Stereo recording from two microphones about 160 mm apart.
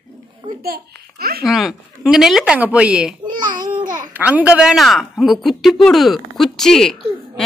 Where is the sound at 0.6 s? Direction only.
70° right (ahead or behind).